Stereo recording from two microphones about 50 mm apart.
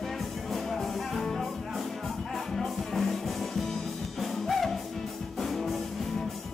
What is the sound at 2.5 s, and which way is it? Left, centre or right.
Music, centre.